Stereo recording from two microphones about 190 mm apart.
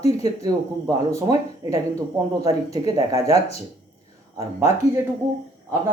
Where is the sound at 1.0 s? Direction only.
15° right (ahead or behind).